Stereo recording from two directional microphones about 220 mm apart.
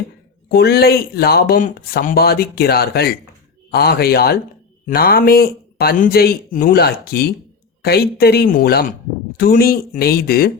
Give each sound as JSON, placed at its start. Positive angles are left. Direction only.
{"t": 0.4, "sound": "speech", "side_deg": 45}